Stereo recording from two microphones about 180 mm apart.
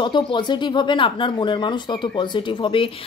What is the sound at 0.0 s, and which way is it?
Speech, 25° left (ahead or behind).